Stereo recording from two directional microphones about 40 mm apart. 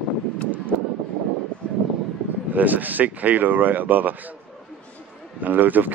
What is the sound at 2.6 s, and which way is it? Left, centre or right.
Speech, right.